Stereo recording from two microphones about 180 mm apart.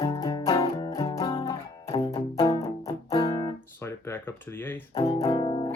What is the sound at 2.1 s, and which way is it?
Music, 30° left (ahead or behind).